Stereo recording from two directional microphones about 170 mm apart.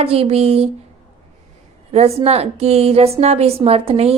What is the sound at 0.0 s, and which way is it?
Speech, 35° right (ahead or behind).